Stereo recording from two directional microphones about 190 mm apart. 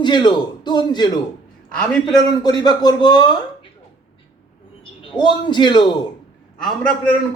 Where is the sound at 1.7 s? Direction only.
5° left (ahead or behind).